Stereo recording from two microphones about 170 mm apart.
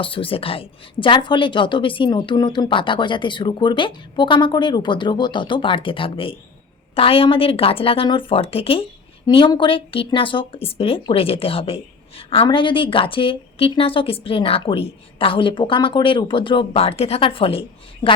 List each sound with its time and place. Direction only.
0.0 s a woman's voice: 30° left (ahead or behind)